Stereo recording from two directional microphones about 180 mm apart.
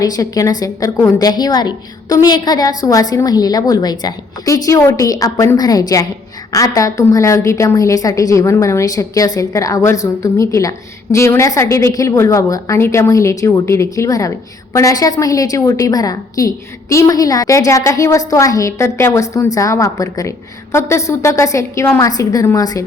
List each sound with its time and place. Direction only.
0.0 s a woman's voice: 20° left (ahead or behind)